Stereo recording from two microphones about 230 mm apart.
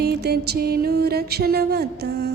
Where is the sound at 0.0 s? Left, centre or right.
Right.